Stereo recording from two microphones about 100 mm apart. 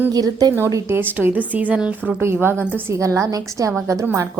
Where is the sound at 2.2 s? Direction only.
25° right (ahead or behind).